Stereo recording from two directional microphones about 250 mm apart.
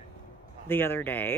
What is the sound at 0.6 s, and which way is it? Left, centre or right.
Speech, centre.